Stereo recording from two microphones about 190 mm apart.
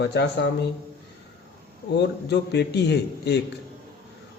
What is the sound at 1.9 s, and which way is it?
Speech, 65° left (ahead or behind).